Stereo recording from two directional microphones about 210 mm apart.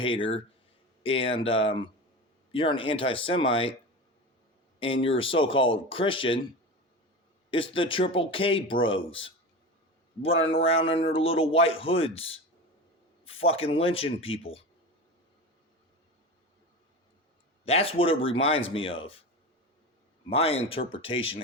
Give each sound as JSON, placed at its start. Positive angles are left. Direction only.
{"t": 1.0, "sound": "a man's voice", "side_deg": 25}
{"t": 4.8, "sound": "a man's voice", "side_deg": 25}
{"t": 7.5, "sound": "a man's voice", "side_deg": 25}
{"t": 10.2, "sound": "a man's voice", "side_deg": 25}
{"t": 17.7, "sound": "a man's voice", "side_deg": 25}
{"t": 20.3, "sound": "a man's voice", "side_deg": 30}